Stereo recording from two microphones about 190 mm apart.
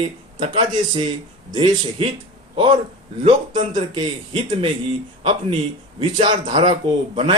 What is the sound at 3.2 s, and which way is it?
A man's voice, 25° right (ahead or behind).